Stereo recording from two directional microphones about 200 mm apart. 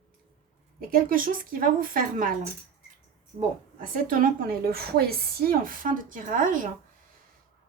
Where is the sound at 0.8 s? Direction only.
45° right (ahead or behind).